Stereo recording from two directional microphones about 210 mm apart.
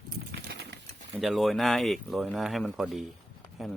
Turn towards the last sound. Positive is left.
turn(degrees=0)  # may be behind; listen again after turning